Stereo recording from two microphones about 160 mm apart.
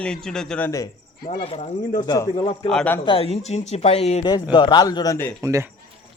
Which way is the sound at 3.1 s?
35° left (ahead or behind).